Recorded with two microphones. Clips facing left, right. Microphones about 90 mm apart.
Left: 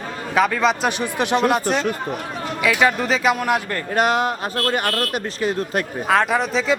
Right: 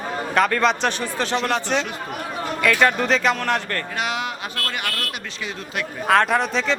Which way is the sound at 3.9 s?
45° left (ahead or behind).